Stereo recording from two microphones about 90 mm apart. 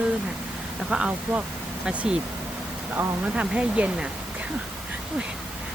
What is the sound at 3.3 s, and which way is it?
Speech, 15° right (ahead or behind).